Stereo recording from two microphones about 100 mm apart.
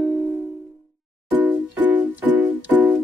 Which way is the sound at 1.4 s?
20° right (ahead or behind).